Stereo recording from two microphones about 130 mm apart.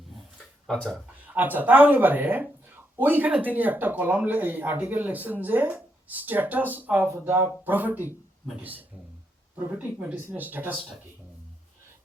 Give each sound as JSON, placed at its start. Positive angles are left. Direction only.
{"t": 0.1, "sound": "a sound", "side_deg": 5}
{"t": 1.3, "sound": "speech", "side_deg": -15}
{"t": 9.6, "sound": "speech", "side_deg": -15}